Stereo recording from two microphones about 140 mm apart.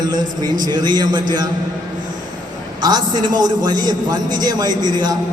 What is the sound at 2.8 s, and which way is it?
A man's voice, 30° right (ahead or behind).